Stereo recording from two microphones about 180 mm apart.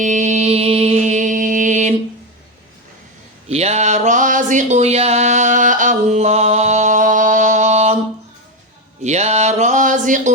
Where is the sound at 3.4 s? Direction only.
35° right (ahead or behind).